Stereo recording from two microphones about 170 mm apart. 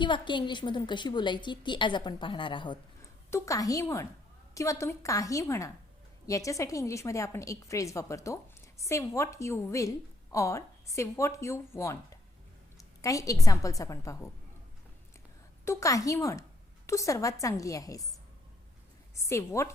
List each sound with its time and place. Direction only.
0.0 s a woman's voice: 30° left (ahead or behind)
3.2 s a woman's voice: 15° left (ahead or behind)
15.6 s a woman's voice: 15° left (ahead or behind)
19.1 s a woman's voice: 15° left (ahead or behind)